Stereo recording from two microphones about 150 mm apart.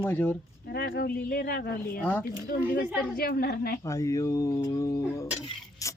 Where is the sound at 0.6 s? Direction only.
90° left.